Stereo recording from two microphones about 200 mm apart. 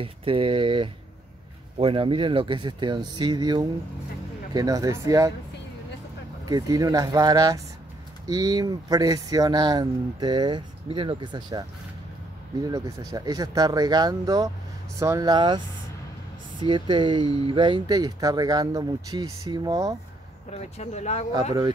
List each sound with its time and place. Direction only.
0.0 s speech: 25° right (ahead or behind)
6.4 s speech: 20° right (ahead or behind)
12.6 s speech: 15° right (ahead or behind)
20.5 s speech: 35° left (ahead or behind)
21.3 s speech: 20° right (ahead or behind)